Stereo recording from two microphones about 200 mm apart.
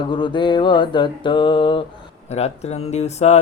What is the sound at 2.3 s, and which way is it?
Speech, 35° left (ahead or behind).